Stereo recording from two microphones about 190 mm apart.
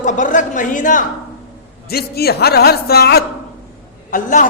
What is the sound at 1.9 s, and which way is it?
A man's voice, 55° left (ahead or behind).